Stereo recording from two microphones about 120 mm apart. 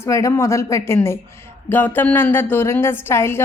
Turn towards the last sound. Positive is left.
turn(degrees=20)  # may be behind; listen again after turning